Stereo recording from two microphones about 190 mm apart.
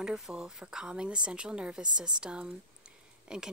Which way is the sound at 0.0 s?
5° right (ahead or behind).